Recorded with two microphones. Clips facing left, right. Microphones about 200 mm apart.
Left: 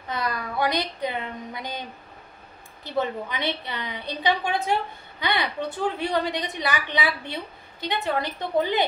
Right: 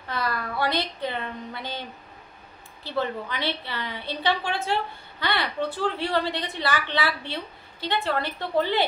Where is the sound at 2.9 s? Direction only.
15° left (ahead or behind).